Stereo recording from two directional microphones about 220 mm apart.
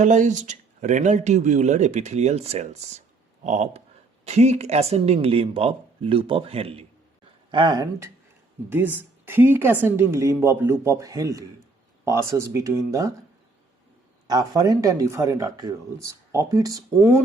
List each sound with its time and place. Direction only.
0.0 s speech: 35° right (ahead or behind); by 13.1 s 15° right (ahead or behind)
14.3 s speech: 15° right (ahead or behind)